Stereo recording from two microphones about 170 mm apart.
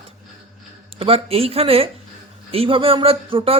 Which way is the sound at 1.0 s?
35° right (ahead or behind).